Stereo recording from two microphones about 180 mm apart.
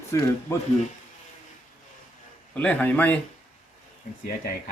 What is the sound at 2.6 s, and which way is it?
Speech, 5° left (ahead or behind).